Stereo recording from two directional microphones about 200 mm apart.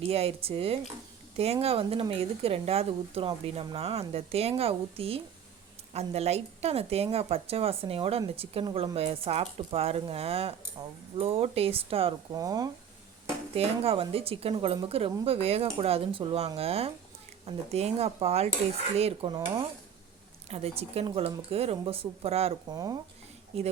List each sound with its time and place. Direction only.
0.0 s a woman's voice: 30° right (ahead or behind)
13.6 s a woman's voice: 30° right (ahead or behind)
20.5 s a woman's voice: 30° right (ahead or behind)
22.7 s speech: 20° right (ahead or behind)